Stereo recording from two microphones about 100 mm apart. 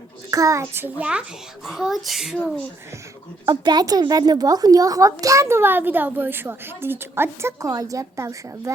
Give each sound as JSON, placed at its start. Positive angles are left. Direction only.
{"t": 0.3, "sound": "a woman's voice", "side_deg": -35}
{"t": 3.4, "sound": "a woman's voice", "side_deg": -45}